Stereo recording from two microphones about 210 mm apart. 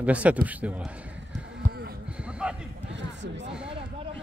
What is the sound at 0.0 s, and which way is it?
Speech, 5° right (ahead or behind).